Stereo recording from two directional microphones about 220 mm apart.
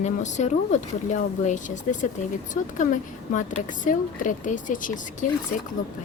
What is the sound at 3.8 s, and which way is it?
Speech, 35° left (ahead or behind).